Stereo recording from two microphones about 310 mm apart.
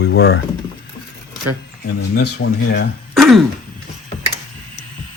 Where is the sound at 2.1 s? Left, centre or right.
Left.